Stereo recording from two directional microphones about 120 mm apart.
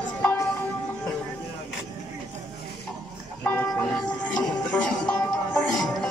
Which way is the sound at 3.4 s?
15° left (ahead or behind).